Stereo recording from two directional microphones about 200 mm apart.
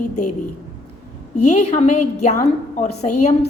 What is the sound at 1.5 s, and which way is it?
A woman's voice, 35° left (ahead or behind).